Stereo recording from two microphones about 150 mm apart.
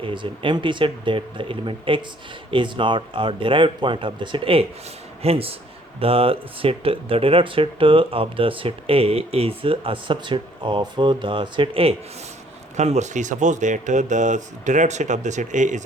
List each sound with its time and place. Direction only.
0.0 s speech: 35° right (ahead or behind); by 15.8 s 55° right (ahead or behind)